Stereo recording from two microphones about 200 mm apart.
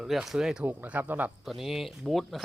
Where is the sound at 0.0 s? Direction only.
Centre (ahead or behind).